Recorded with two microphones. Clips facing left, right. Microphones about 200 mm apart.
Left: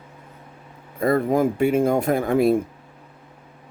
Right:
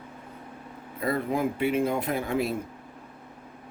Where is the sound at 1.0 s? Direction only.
45° left (ahead or behind).